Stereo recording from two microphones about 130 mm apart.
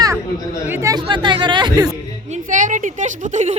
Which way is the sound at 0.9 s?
35° right (ahead or behind).